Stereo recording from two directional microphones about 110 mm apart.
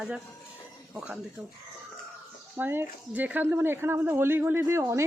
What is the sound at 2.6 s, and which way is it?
Speech, 20° right (ahead or behind).